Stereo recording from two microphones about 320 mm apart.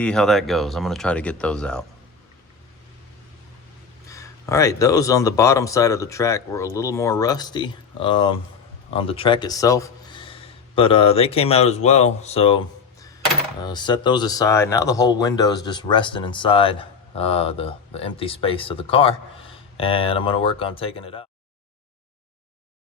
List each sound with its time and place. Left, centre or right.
0.0 s speech: centre
4.1 s speech: centre
13.7 s speech: centre